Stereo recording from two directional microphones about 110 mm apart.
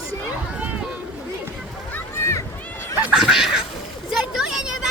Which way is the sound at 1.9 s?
20° left (ahead or behind).